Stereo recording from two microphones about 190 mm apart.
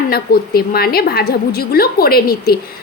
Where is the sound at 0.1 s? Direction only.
55° left (ahead or behind).